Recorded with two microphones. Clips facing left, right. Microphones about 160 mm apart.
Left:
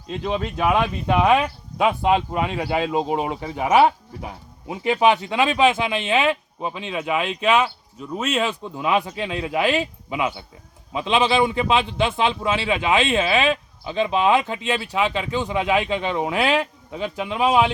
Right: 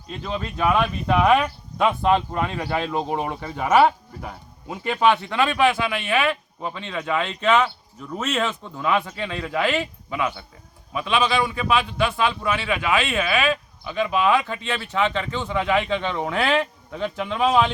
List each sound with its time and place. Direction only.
0.2 s a man's voice: 20° left (ahead or behind)